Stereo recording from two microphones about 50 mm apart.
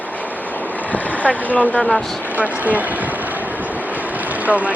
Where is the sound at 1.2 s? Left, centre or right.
Left.